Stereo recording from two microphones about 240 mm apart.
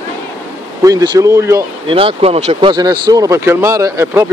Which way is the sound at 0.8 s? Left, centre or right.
Centre.